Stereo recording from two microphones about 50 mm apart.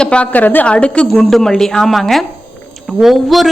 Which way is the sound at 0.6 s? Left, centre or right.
Left.